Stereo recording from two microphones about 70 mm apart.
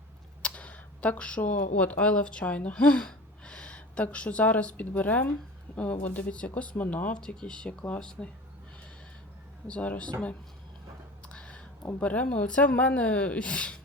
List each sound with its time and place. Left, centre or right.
0.4 s speech: centre
7.2 s speech: centre
9.6 s speech: centre
11.3 s a sound: centre
11.9 s speech: centre